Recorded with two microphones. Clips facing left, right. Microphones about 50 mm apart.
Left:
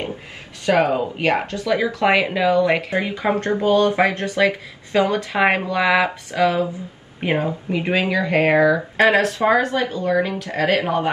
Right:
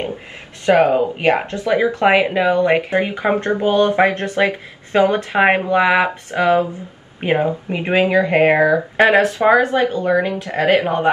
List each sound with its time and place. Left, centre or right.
0.7 s speech: right
2.0 s speech: centre
2.7 s speech: right
3.6 s speech: right